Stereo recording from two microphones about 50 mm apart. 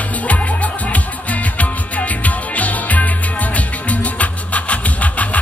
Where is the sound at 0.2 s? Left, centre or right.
Left.